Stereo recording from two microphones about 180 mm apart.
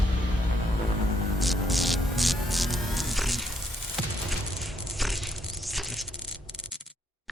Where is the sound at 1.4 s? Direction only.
Centre (ahead or behind).